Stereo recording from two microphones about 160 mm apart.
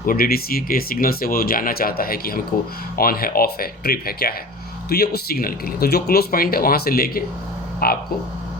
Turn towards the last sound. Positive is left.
turn(degrees=70)  # may be behind; listen again after turning